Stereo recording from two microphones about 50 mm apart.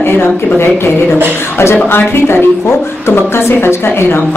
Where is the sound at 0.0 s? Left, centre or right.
Left.